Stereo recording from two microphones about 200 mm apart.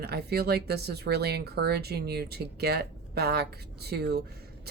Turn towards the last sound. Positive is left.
turn(degrees=-55)  # may be behind; listen again after turning